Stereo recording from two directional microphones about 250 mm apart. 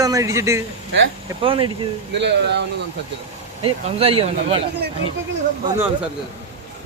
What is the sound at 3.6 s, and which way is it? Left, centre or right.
Speech, right.